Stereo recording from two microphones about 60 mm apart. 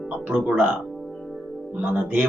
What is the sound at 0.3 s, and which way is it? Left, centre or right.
Speech, right.